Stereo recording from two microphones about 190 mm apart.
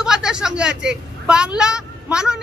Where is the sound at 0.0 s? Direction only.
5° right (ahead or behind).